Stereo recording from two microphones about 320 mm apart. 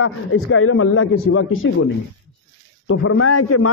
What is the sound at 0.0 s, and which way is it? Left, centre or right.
A man's voice, left.